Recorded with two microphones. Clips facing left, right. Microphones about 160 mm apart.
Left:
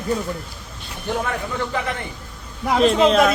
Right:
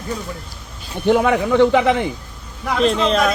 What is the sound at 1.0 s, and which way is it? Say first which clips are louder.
Speech: right 10 dB; 70° right (ahead or behind).